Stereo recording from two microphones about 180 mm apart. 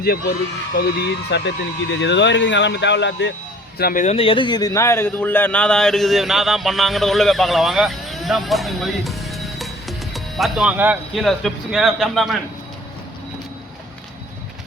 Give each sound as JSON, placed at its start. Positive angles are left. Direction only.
{"t": 0.8, "sound": "speech", "side_deg": 65}
{"t": 3.8, "sound": "speech", "side_deg": 55}
{"t": 4.0, "sound": "speech", "side_deg": 35}